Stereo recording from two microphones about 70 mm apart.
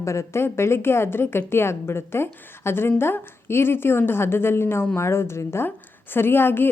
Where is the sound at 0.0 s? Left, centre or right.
Left.